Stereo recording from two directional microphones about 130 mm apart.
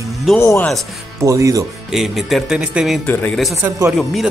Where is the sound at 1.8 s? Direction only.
Centre (ahead or behind).